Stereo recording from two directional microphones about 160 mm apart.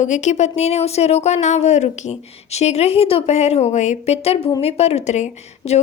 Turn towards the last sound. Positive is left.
turn(degrees=40)  # may be behind; listen again after turning